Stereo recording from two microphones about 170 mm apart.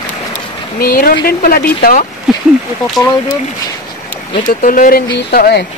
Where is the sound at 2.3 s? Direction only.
Centre (ahead or behind).